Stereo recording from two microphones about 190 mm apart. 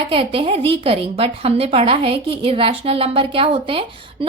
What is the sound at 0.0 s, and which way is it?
A woman's voice, 30° right (ahead or behind).